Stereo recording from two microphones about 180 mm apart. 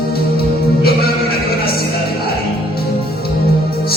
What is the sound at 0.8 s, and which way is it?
Music, 60° left (ahead or behind).